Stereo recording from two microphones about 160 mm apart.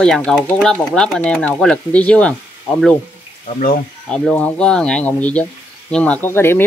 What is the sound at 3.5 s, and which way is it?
Speech, 45° left (ahead or behind).